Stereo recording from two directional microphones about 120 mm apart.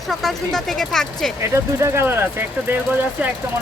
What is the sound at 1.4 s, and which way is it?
Speech, 25° right (ahead or behind).